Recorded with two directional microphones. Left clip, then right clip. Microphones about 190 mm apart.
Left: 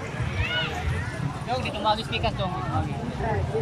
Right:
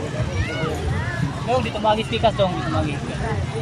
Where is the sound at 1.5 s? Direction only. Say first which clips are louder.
Right 5 dB; 35° right (ahead or behind).